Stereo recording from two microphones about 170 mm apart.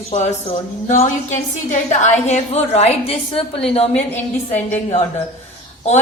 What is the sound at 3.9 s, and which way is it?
Speech, 10° left (ahead or behind).